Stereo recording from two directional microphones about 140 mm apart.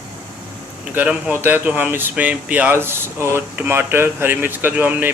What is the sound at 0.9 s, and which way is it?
Speech, 10° right (ahead or behind).